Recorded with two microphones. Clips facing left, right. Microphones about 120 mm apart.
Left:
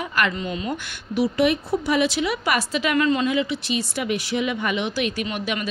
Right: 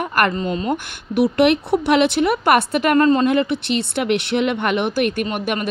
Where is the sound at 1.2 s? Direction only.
65° right (ahead or behind).